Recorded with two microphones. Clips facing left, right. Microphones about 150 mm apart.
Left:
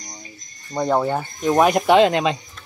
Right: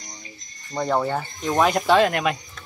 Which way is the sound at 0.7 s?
10° left (ahead or behind).